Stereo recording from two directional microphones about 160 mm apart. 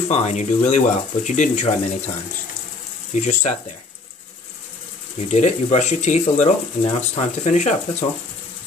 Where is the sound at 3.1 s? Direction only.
45° left (ahead or behind).